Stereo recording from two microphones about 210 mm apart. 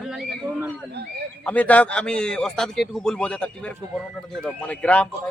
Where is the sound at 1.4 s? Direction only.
5° left (ahead or behind).